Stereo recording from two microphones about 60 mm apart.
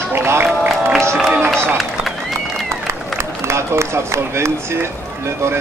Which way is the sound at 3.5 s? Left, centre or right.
Right.